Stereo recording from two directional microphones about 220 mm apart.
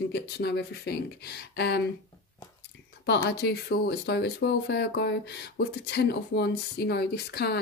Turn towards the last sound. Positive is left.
turn(degrees=50)  # may be behind; listen again after turning